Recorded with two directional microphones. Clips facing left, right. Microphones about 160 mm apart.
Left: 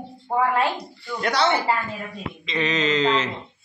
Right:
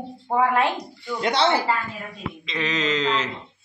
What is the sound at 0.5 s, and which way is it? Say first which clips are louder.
Speech: right 1 dB; 20° right (ahead or behind).